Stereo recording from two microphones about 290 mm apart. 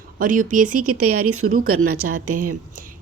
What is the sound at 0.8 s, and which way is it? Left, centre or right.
Speech, right.